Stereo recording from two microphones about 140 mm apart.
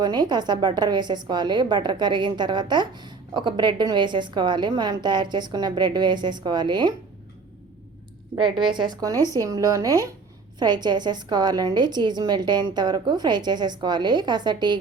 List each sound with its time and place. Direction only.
0.0 s a woman's voice: 30° right (ahead or behind)
8.5 s a woman's voice: 35° right (ahead or behind)